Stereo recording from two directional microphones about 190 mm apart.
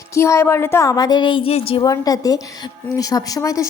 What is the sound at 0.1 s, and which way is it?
A woman's voice, 15° left (ahead or behind).